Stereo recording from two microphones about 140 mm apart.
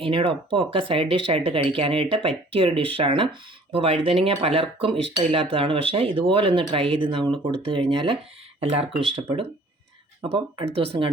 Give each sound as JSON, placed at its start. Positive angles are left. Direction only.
{"t": 0.0, "sound": "speech", "side_deg": -40}